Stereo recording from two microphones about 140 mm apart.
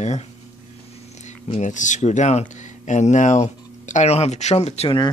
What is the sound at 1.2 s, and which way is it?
Speech, 55° left (ahead or behind).